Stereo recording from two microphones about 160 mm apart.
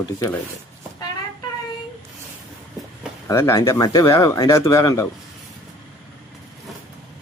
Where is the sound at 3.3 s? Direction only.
15° left (ahead or behind).